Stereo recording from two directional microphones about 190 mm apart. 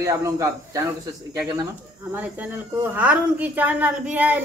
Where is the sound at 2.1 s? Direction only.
10° right (ahead or behind).